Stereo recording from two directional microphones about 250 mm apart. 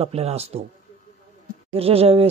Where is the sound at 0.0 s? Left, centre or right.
Right.